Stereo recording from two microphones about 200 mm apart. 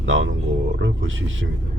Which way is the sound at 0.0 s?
70° right (ahead or behind).